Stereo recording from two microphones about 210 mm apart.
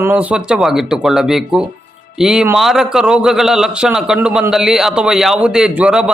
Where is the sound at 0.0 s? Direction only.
5° right (ahead or behind).